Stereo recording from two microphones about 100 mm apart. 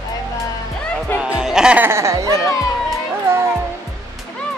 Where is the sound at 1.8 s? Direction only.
25° right (ahead or behind).